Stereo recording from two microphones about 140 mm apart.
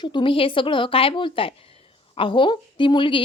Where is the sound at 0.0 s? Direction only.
35° left (ahead or behind).